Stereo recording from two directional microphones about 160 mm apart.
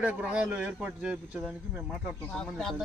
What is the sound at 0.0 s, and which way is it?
Speech, 10° right (ahead or behind).